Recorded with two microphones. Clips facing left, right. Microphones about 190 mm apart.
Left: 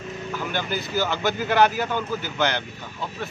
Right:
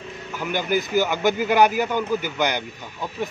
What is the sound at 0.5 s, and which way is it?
Speech, 15° right (ahead or behind).